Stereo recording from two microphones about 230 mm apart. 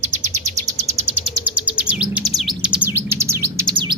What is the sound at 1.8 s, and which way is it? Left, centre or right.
Chirp, centre.